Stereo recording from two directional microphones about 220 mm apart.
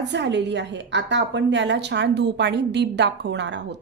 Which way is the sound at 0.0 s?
50° right (ahead or behind).